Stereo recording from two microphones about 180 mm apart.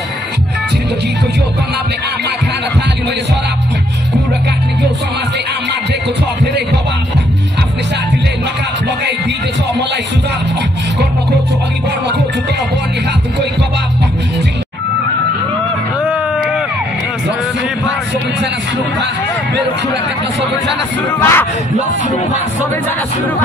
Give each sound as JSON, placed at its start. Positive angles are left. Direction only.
{"t": 6.4, "sound": "music", "side_deg": -70}
{"t": 16.1, "sound": "a sound", "side_deg": -5}
{"t": 21.1, "sound": "speech", "side_deg": 10}